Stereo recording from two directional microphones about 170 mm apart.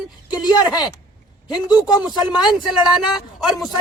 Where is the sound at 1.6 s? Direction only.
25° left (ahead or behind).